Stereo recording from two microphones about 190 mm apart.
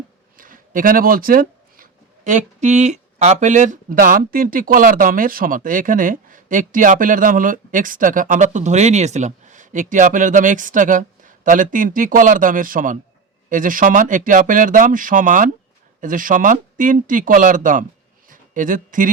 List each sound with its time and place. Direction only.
0.3 s speech: 45° right (ahead or behind)